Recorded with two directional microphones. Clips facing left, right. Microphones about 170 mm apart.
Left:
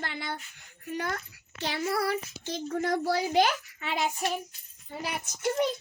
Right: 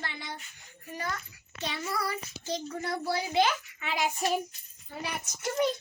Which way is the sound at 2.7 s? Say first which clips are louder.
Left 7 dB; 50° left (ahead or behind).